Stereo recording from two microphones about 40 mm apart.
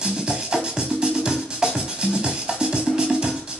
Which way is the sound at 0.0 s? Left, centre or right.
Right.